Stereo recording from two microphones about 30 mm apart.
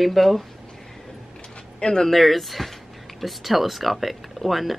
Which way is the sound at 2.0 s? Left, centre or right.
Centre.